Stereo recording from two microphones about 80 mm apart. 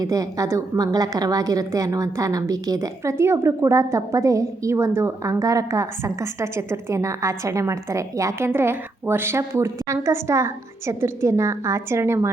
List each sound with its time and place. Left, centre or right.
0.0 s a woman's voice: right